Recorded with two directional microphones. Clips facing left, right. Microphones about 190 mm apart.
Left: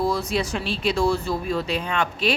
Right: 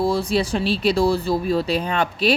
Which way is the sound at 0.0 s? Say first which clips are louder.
Right 3 dB; 30° right (ahead or behind).